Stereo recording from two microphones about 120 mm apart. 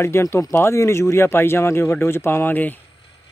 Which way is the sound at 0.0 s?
20° left (ahead or behind).